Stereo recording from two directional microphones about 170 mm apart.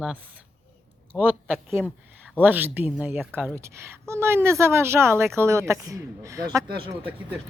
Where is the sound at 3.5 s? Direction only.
15° right (ahead or behind).